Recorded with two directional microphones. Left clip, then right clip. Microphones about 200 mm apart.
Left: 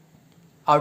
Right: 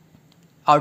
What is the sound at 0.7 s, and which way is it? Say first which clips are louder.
Speech: right 3 dB; 20° right (ahead or behind).